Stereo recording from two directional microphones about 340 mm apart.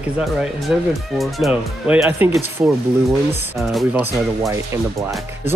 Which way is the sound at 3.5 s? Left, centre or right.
Centre.